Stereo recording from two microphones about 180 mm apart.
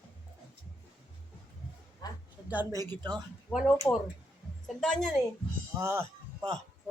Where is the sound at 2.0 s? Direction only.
20° left (ahead or behind).